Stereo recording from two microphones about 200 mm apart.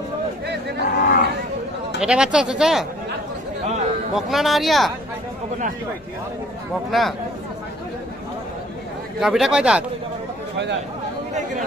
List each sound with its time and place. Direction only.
0.8 s cattle: 50° left (ahead or behind)
2.0 s speech: 5° right (ahead or behind)
4.1 s speech: centre (ahead or behind)
6.9 s speech: centre (ahead or behind)
9.2 s speech: 5° right (ahead or behind)